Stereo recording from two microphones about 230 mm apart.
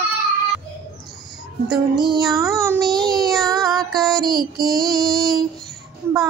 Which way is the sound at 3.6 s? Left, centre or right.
Centre.